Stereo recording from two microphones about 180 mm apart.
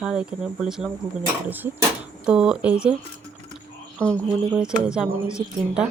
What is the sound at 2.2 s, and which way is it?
Speech, 5° right (ahead or behind).